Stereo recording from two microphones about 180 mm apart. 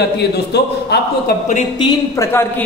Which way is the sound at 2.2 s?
15° left (ahead or behind).